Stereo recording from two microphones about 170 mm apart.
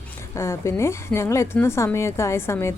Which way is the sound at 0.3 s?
15° left (ahead or behind).